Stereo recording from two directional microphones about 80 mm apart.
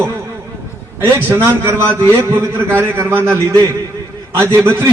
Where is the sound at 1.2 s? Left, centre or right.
Right.